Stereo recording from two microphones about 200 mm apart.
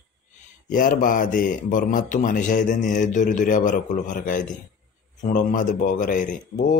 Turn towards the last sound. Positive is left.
turn(degrees=40)  # may be behind; listen again after turning